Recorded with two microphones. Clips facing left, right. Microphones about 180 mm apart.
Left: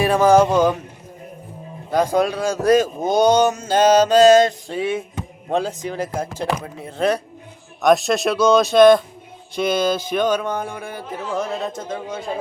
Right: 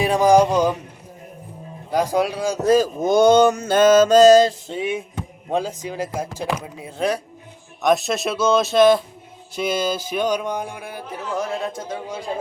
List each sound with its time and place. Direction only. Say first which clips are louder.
0.0 s speech: left 1 dB; 15° right (ahead or behind)
1.9 s speech: left 2 dB; 10° right (ahead or behind)
2.6 s speech: left 1 dB; 30° right (ahead or behind)
3.0 s mantra: right 2 dB; 55° right (ahead or behind); by 4.5 s 35° right (ahead or behind)
4.7 s speech: left 2 dB; 15° right (ahead or behind)